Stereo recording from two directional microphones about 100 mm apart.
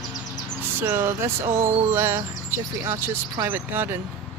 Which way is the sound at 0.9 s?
25° right (ahead or behind).